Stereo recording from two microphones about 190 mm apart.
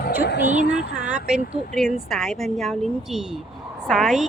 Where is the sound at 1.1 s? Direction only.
5° right (ahead or behind).